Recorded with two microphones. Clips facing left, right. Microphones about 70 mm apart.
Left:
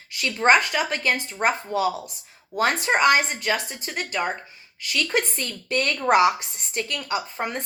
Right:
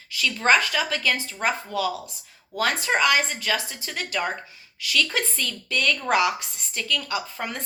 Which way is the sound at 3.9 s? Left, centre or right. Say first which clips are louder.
Left 1 dB; centre.